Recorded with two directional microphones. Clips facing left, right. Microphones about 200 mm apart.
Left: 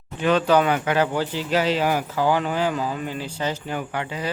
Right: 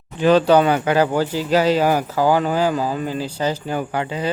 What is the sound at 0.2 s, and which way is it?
Speech, 35° right (ahead or behind).